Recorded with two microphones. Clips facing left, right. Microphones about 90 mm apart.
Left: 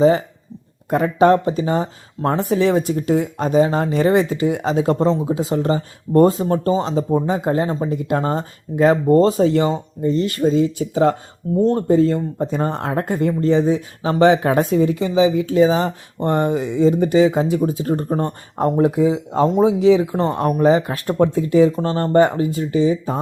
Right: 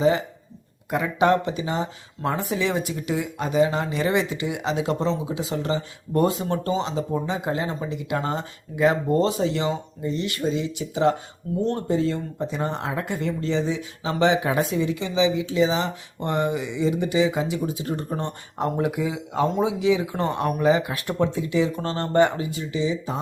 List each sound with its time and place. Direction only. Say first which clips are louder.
0.0 s speech: left 6 dB; 35° left (ahead or behind)
21.8 s speech: left 5 dB; 30° left (ahead or behind); by 23.2 s 50° left (ahead or behind)